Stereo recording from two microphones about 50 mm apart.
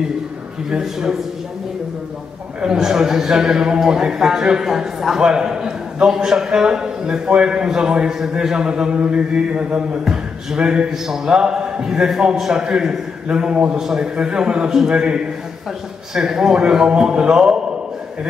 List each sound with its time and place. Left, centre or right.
0.7 s a man's voice: centre
2.6 s a man's voice: centre
16.2 s a man's voice: centre